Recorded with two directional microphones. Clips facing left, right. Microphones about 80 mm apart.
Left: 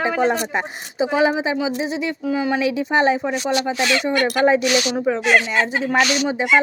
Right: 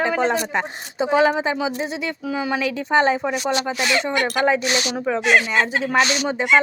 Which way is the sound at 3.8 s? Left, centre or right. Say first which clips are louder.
Left 1 dB; right.